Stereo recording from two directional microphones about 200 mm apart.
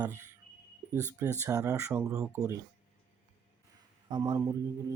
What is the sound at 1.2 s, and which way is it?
Speech, 15° right (ahead or behind).